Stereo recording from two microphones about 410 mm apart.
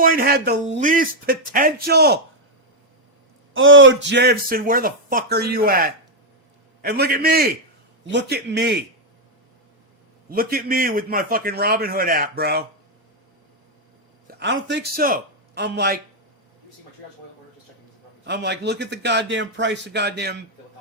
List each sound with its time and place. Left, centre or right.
0.0 s speech: right
3.5 s speech: right
10.2 s speech: right
14.3 s a man's voice: right
18.3 s speech: right